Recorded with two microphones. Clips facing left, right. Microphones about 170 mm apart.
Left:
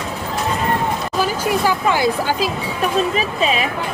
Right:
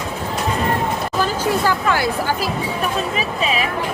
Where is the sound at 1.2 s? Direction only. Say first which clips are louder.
Left 1 dB; 15° left (ahead or behind).